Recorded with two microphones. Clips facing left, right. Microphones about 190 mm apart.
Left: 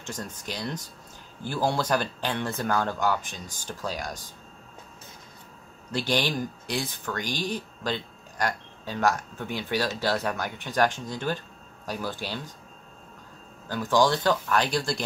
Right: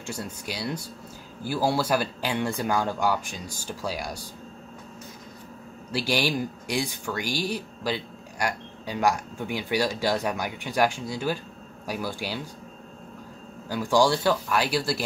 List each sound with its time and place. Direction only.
0.0 s speech: 10° right (ahead or behind)
5.9 s speech: 10° right (ahead or behind)
13.7 s speech: 10° right (ahead or behind)